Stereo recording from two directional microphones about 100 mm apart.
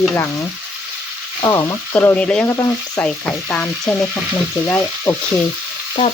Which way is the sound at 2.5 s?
35° left (ahead or behind).